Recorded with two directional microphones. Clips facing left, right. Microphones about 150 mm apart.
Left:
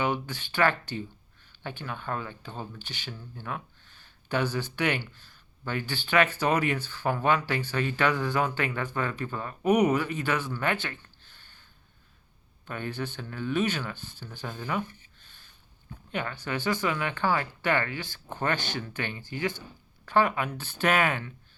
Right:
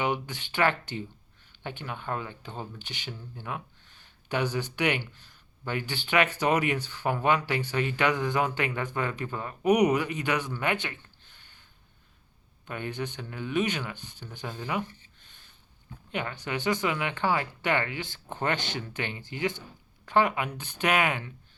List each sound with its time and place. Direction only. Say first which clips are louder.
0.0 s speech: even; 20° right (ahead or behind)
12.6 s speech: even; 15° right (ahead or behind)